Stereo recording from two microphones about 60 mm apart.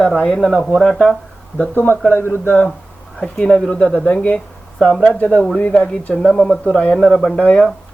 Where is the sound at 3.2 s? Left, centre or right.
Centre.